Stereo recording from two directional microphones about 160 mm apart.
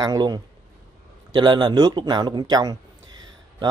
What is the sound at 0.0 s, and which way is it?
A man's voice, 25° right (ahead or behind).